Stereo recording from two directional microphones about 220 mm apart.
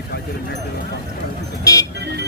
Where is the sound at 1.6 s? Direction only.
15° left (ahead or behind).